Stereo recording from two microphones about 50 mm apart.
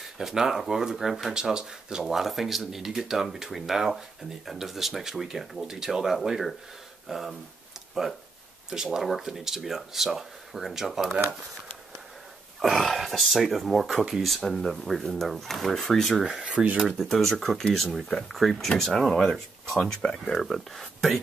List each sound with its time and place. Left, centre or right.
0.2 s speech: centre
12.5 s speech: centre
19.8 s speech: centre
20.3 s speech: centre